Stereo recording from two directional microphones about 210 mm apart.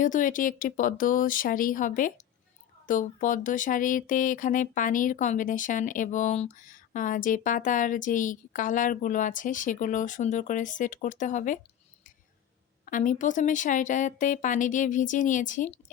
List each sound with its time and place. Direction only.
0.0 s speech: 40° left (ahead or behind)
12.8 s speech: 40° left (ahead or behind)